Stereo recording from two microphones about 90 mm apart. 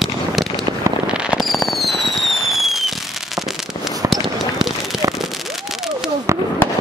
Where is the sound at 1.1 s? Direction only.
Centre (ahead or behind).